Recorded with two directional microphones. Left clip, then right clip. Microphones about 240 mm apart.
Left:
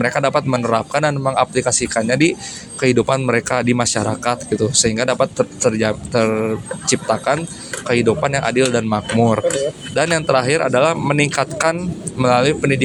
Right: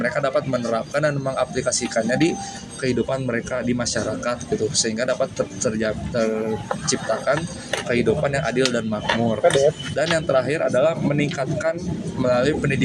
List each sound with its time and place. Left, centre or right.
0.0 s speech: left
7.9 s speech: left